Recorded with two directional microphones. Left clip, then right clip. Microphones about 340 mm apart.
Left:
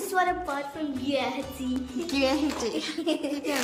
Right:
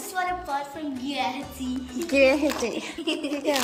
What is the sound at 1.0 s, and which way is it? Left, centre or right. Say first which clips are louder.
Speech: even; centre.